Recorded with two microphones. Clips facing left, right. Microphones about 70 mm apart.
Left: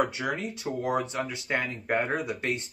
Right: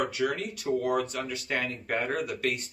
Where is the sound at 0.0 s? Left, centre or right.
Left.